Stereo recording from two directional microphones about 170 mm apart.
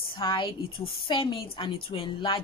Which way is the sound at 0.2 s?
30° left (ahead or behind).